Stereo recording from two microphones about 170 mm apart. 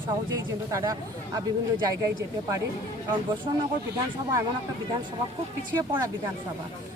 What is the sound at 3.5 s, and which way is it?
Speech, 25° right (ahead or behind).